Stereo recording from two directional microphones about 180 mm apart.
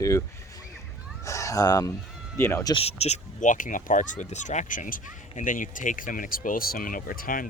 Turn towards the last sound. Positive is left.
turn(degrees=50)  # may be behind; listen again after turning